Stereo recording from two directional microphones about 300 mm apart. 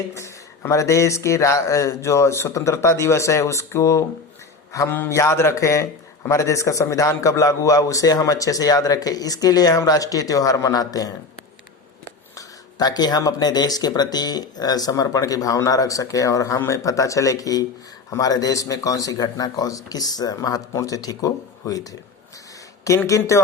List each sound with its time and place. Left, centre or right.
0.1 s a man's voice: centre
12.8 s a man's voice: centre